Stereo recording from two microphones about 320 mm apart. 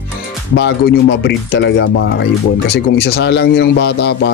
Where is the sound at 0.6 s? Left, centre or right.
Left.